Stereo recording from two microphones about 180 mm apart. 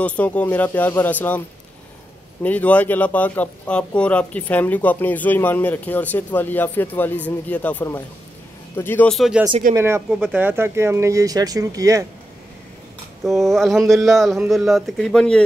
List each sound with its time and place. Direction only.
0.0 s speech: 5° left (ahead or behind)
2.4 s speech: 10° left (ahead or behind)
9.8 s speech: 15° right (ahead or behind)
13.2 s speech: centre (ahead or behind)